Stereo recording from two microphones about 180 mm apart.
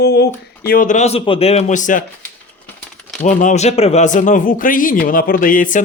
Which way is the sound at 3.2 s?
45° left (ahead or behind).